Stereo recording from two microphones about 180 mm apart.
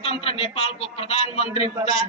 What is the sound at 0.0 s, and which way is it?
A man's voice, 30° left (ahead or behind).